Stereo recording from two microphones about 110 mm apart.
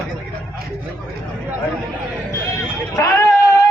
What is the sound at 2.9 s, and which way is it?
Speech, 25° left (ahead or behind).